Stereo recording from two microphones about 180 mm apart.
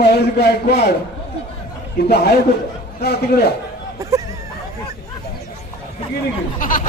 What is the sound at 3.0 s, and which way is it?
Speech, 65° left (ahead or behind).